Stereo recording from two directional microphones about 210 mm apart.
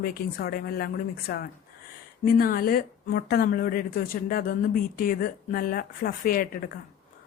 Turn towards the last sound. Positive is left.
turn(degrees=45)  # may be behind; listen again after turning